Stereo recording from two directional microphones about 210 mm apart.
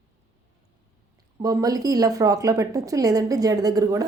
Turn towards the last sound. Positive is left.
turn(degrees=-15)  # may be behind; listen again after turning